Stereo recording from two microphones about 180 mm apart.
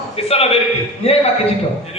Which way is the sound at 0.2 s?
35° left (ahead or behind).